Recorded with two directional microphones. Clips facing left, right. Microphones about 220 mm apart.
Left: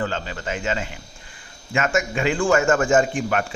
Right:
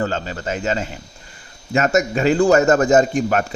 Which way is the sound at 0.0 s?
40° right (ahead or behind).